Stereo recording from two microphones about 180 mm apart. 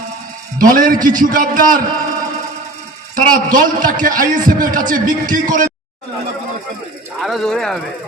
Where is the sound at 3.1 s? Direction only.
50° right (ahead or behind).